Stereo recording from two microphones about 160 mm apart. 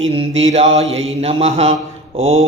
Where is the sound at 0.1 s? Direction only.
35° right (ahead or behind).